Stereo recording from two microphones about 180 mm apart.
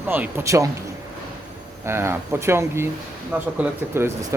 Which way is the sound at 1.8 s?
15° right (ahead or behind).